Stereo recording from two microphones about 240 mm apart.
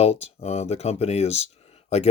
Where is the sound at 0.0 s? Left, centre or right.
Left.